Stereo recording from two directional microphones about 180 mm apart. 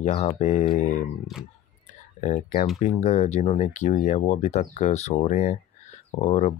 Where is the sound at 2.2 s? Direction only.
40° left (ahead or behind).